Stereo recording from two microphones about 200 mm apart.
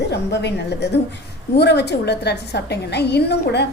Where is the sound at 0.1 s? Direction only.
55° left (ahead or behind).